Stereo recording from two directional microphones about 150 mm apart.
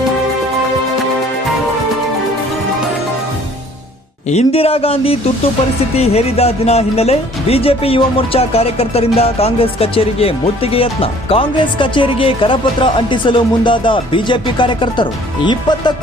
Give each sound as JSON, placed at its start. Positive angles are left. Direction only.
{"t": 4.3, "sound": "speech", "side_deg": 45}